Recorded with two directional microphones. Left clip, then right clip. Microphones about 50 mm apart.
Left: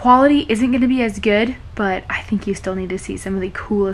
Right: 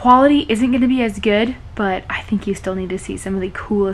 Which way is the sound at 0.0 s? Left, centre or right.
Centre.